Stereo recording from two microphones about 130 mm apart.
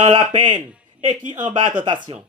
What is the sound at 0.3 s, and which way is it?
Speech, 70° right (ahead or behind).